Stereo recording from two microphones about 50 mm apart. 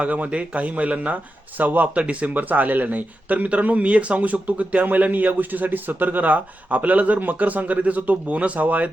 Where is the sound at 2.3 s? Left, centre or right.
Right.